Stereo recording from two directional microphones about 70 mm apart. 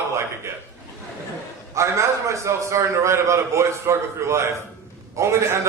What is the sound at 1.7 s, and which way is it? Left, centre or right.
A man's voice, right.